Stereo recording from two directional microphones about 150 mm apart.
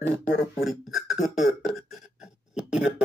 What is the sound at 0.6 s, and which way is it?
Speech, centre (ahead or behind).